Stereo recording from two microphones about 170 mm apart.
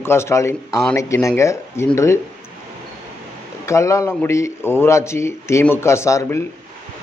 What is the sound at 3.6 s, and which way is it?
Speech, 15° left (ahead or behind).